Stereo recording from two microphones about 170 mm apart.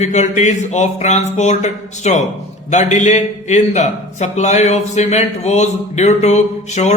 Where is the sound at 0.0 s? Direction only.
45° left (ahead or behind).